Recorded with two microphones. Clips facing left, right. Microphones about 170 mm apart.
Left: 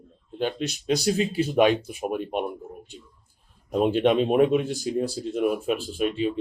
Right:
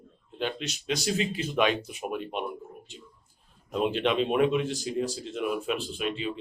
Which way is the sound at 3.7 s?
40° left (ahead or behind).